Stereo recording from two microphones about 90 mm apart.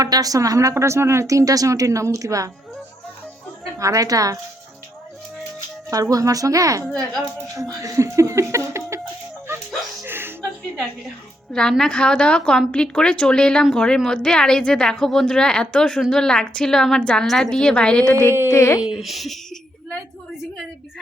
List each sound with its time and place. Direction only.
0.0 s a woman's voice: 45° right (ahead or behind)
3.8 s a woman's voice: 40° right (ahead or behind)
5.9 s a woman's voice: 40° right (ahead or behind)
7.4 s a sound: 40° right (ahead or behind)
10.1 s music: 25° right (ahead or behind)
11.8 s a woman's voice: 10° left (ahead or behind)
18.0 s a woman's voice: 25° left (ahead or behind)
18.8 s a child's voice: 5° right (ahead or behind)